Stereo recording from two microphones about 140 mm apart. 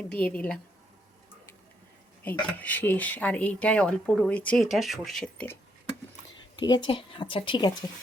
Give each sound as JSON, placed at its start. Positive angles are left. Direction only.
{"t": 0.1, "sound": "speech", "side_deg": 10}
{"t": 2.5, "sound": "speech", "side_deg": 10}
{"t": 6.6, "sound": "speech", "side_deg": 30}